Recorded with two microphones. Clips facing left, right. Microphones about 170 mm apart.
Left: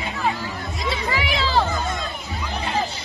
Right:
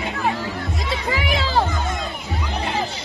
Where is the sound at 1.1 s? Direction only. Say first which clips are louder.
Right 3 dB; 45° right (ahead or behind).